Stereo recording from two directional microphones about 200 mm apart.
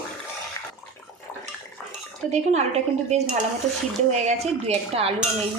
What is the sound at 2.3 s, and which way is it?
A woman's voice, 35° right (ahead or behind).